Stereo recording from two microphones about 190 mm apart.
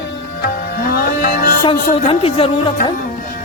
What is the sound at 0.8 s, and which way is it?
Music, 50° left (ahead or behind).